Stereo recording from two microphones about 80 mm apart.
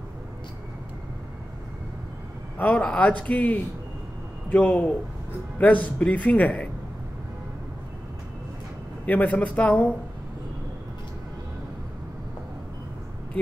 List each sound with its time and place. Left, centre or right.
2.7 s a man's voice: centre
9.0 s a man's voice: centre